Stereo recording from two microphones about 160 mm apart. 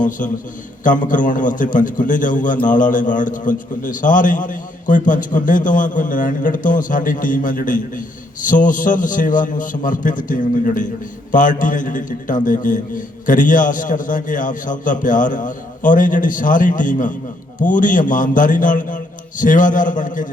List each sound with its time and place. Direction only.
0.9 s a man's voice: 55° left (ahead or behind)